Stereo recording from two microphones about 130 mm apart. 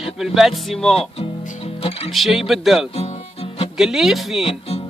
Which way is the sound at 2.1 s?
Centre (ahead or behind).